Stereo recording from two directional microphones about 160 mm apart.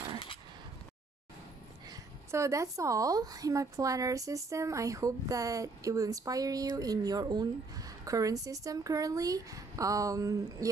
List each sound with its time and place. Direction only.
1.9 s a woman's voice: 20° right (ahead or behind)